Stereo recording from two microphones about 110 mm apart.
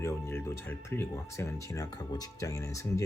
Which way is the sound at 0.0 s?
25° left (ahead or behind).